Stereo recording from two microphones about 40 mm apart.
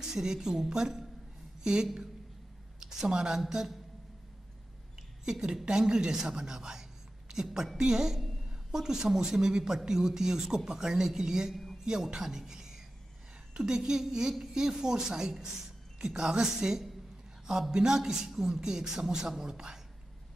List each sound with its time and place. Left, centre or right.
0.1 s a man's voice: centre
5.2 s a man's voice: centre
7.7 s a man's voice: centre